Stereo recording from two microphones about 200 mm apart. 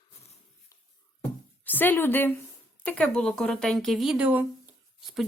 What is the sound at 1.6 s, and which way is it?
A woman's voice, 10° left (ahead or behind).